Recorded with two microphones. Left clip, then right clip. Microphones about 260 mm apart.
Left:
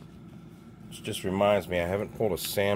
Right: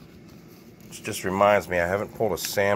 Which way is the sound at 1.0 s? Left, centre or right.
Centre.